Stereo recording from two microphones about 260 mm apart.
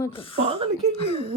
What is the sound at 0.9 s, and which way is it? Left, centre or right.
Speech, left.